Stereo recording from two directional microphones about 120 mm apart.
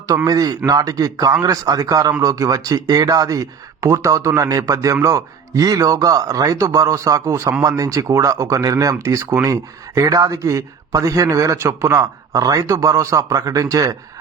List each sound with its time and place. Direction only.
0.3 s a man's voice: 30° right (ahead or behind)